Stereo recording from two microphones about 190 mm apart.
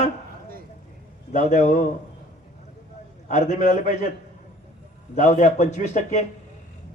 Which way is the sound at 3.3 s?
40° left (ahead or behind).